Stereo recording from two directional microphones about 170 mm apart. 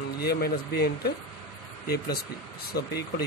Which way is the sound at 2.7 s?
70° left (ahead or behind).